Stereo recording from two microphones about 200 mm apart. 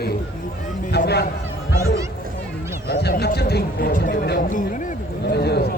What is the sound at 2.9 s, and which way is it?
Speech, 55° left (ahead or behind).